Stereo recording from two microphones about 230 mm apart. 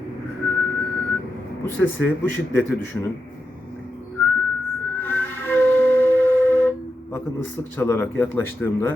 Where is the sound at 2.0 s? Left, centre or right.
Centre.